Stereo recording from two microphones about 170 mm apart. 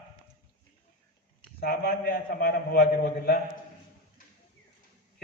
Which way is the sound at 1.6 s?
60° left (ahead or behind).